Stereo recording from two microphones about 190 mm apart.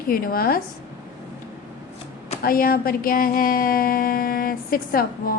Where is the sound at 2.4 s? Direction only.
50° left (ahead or behind).